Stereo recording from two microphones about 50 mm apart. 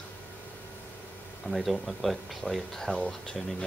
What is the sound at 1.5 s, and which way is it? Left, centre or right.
Speech, centre.